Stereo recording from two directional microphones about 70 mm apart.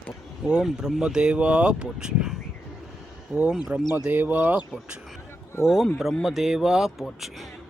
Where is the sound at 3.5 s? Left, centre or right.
Centre.